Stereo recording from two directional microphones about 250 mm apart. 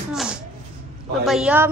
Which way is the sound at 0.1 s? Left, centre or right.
Centre.